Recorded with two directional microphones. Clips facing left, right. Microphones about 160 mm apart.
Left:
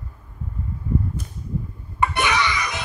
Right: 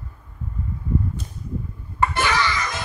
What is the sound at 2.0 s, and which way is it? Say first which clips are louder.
Music: even; 15° left (ahead or behind).